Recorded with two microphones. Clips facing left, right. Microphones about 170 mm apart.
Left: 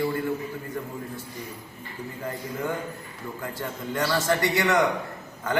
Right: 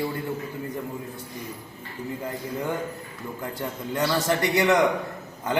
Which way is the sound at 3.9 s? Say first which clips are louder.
Even; 20° right (ahead or behind).